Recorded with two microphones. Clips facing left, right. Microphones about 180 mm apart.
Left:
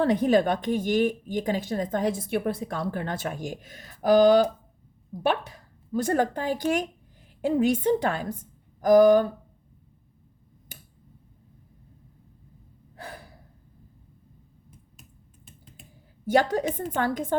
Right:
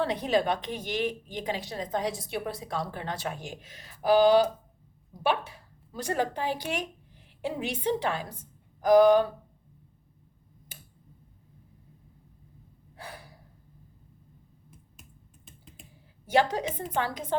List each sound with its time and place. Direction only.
0.0 s speech: 45° left (ahead or behind)
13.0 s gasp: 45° left (ahead or behind)
16.3 s speech: 45° left (ahead or behind)